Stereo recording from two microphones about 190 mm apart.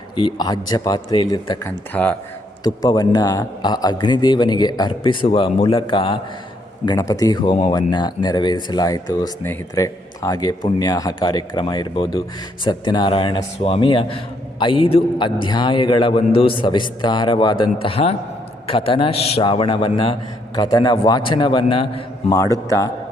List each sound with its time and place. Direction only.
0.2 s speech: 25° left (ahead or behind)
1.6 s speech: 10° left (ahead or behind)
2.8 s speech: 20° left (ahead or behind)